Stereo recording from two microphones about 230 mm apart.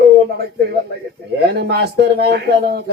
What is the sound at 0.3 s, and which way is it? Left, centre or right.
Speech, right.